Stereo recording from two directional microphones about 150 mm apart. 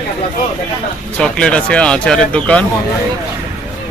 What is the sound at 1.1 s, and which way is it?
Speech, 5° left (ahead or behind).